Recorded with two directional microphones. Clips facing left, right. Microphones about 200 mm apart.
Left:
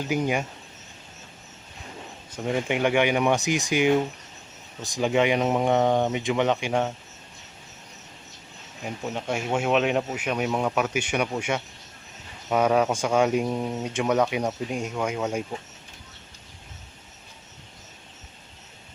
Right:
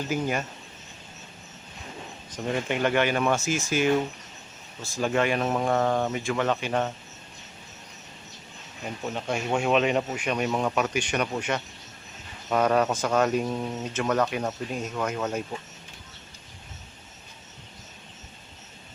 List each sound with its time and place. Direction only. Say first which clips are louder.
0.0 s speech: left 2 dB; 15° left (ahead or behind)
2.3 s speech: left 2 dB; 5° left (ahead or behind)
8.8 s speech: left 1 dB; 10° left (ahead or behind)